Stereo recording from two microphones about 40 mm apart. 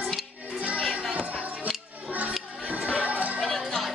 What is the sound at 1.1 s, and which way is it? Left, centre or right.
Music, right.